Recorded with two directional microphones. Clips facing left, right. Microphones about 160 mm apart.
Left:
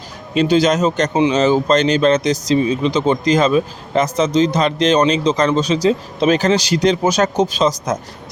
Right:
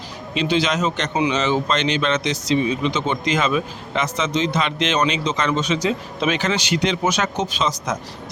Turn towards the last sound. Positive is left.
turn(degrees=40)  # may be behind; listen again after turning